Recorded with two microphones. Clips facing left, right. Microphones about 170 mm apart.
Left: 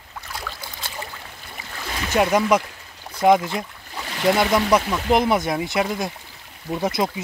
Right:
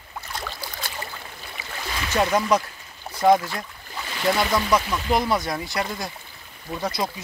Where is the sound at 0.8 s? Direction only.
25° left (ahead or behind).